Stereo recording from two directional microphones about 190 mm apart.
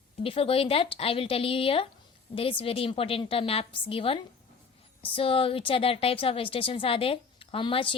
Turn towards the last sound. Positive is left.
turn(degrees=25)  # may be behind; listen again after turning